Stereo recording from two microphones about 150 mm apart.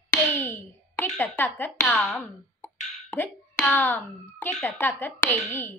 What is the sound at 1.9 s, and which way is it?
A child's voice, 5° left (ahead or behind).